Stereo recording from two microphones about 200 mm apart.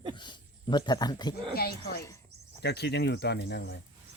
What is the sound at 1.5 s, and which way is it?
A woman's voice, 50° left (ahead or behind).